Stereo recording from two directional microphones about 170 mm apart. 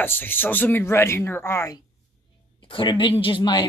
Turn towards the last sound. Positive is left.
turn(degrees=30)  # may be behind; listen again after turning